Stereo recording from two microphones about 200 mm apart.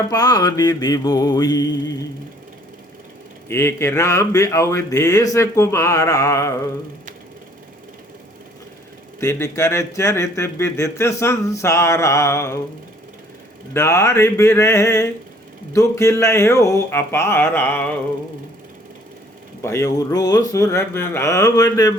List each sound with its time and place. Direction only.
0.1 s mantra: 20° left (ahead or behind)
3.5 s speech: 10° left (ahead or behind)
9.2 s speech: 15° left (ahead or behind)
13.7 s speech: 15° left (ahead or behind)
19.6 s speech: 15° left (ahead or behind)